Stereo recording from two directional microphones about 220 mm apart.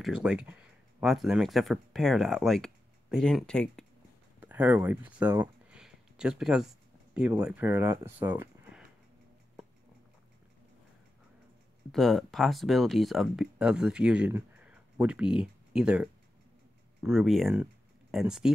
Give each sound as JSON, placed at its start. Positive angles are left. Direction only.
{"t": 0.0, "sound": "speech", "side_deg": -5}
{"t": 4.4, "sound": "speech", "side_deg": -10}
{"t": 11.9, "sound": "speech", "side_deg": 0}